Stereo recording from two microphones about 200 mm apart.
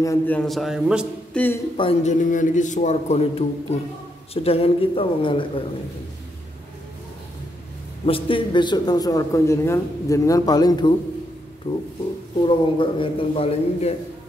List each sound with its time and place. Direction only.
0.0 s a man's voice: 15° left (ahead or behind)
0.5 s speech: centre (ahead or behind)
1.3 s speech: 10° left (ahead or behind)
1.8 s a man's voice: 30° left (ahead or behind)
2.3 s a man's voice: 40° left (ahead or behind)
8.0 s a man's voice: 25° left (ahead or behind)